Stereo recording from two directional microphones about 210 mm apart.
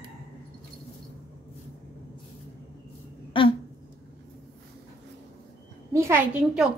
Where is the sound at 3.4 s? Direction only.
25° left (ahead or behind).